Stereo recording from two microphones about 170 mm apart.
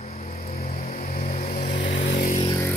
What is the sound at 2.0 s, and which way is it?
Vehicle, 90° left.